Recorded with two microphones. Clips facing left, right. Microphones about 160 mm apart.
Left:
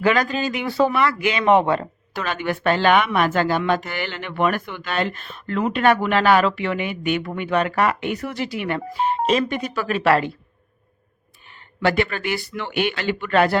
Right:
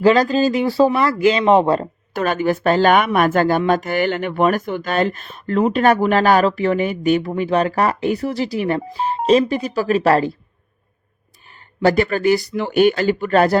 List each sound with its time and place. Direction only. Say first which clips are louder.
0.0 s speech: right 6 dB; 30° right (ahead or behind)
11.4 s speech: right 5 dB; 40° right (ahead or behind)